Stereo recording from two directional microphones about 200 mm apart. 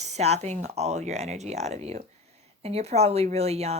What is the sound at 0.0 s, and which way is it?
Speech, 35° right (ahead or behind).